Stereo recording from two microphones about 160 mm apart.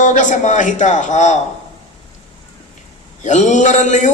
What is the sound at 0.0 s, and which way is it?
A man's voice, 50° left (ahead or behind).